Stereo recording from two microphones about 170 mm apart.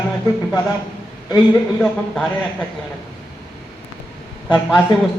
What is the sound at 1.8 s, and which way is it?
Speech, 5° left (ahead or behind).